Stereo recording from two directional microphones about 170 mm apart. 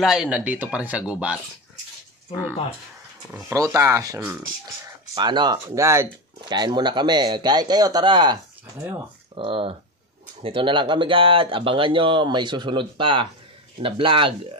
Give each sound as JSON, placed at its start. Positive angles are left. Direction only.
{"t": 0.0, "sound": "speech", "side_deg": 0}
{"t": 3.4, "sound": "speech", "side_deg": -15}
{"t": 5.1, "sound": "speech", "side_deg": -25}
{"t": 8.7, "sound": "speech", "side_deg": -10}
{"t": 9.3, "sound": "speech", "side_deg": -30}